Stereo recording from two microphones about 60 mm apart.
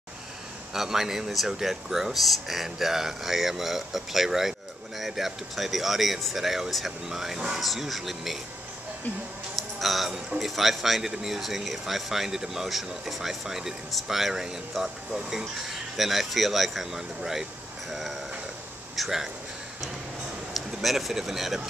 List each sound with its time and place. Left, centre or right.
0.7 s speech: centre
9.6 s a sound: centre
10.4 s speech: centre
18.9 s speech: centre
20.5 s speech: centre